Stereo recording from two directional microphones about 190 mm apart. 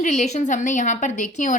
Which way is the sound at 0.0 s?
40° left (ahead or behind).